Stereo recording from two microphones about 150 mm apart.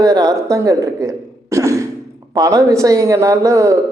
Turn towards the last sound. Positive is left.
turn(degrees=-20)  # may be behind; listen again after turning